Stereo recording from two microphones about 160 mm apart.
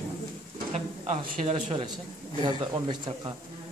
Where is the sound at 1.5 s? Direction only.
40° right (ahead or behind).